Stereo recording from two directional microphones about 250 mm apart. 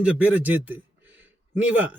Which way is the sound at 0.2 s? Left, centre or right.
Centre.